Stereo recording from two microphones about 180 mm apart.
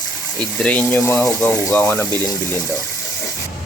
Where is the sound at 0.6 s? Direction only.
5° left (ahead or behind).